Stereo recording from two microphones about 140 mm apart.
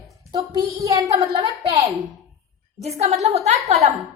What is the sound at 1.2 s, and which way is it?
Speech, 45° right (ahead or behind).